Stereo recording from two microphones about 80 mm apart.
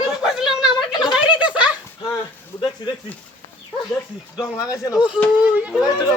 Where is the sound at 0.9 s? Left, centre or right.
Left.